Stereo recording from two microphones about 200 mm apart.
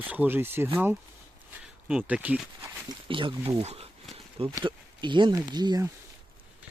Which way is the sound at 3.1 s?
25° right (ahead or behind).